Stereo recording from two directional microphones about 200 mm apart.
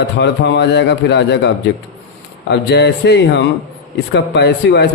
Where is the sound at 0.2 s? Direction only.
60° left (ahead or behind).